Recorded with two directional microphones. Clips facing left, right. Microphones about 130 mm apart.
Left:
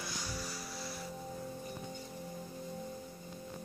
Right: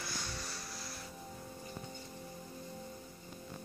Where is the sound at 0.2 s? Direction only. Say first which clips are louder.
Left 3 dB; 10° left (ahead or behind).